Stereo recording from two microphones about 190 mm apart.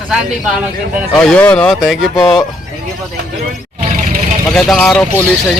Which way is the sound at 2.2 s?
20° left (ahead or behind).